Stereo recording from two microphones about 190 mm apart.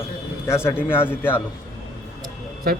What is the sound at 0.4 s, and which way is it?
Speech, 15° left (ahead or behind).